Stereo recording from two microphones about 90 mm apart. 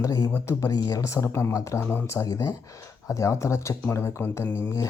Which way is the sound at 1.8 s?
20° left (ahead or behind).